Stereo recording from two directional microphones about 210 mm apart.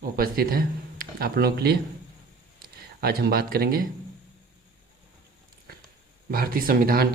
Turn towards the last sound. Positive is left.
turn(degrees=-45)  # may be behind; listen again after turning